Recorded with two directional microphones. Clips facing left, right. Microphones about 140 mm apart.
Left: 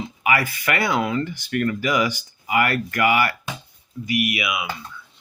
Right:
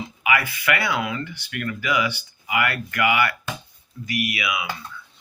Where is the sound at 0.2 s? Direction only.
35° left (ahead or behind).